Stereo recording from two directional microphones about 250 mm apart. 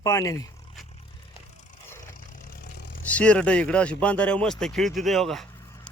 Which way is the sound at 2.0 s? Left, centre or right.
Left.